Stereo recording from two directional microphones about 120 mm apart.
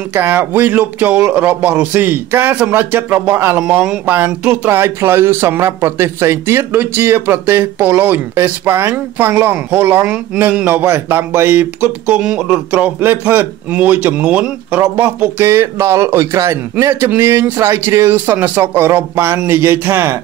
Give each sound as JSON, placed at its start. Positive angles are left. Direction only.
{"t": 0.1, "sound": "a man's voice", "side_deg": -20}